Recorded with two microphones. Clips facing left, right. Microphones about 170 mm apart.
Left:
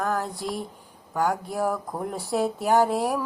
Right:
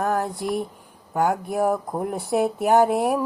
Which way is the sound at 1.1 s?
20° right (ahead or behind).